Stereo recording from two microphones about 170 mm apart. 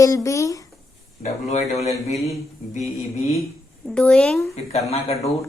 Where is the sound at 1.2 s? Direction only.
45° left (ahead or behind).